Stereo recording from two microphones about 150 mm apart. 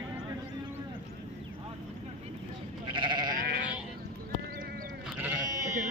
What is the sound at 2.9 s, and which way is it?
Goat, 30° right (ahead or behind).